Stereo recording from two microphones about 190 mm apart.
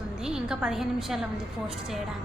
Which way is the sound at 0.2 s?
5° right (ahead or behind).